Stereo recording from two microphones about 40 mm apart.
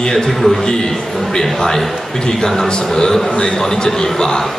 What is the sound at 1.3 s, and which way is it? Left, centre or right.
A man's voice, centre.